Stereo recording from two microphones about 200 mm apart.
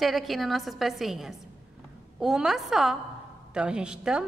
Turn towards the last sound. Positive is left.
turn(degrees=-5)  # may be behind; listen again after turning